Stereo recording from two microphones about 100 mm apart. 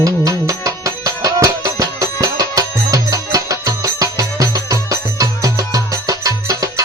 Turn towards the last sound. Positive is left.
turn(degrees=-35)  # may be behind; listen again after turning